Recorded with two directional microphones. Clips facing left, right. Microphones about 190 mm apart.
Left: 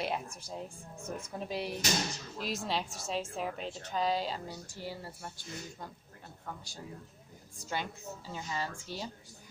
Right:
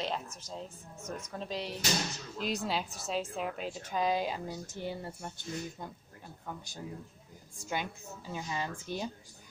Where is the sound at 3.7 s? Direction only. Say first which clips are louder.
Right 1 dB; 10° right (ahead or behind).